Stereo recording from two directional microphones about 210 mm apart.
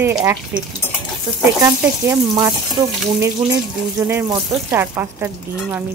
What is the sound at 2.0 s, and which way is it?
Speech, 15° right (ahead or behind).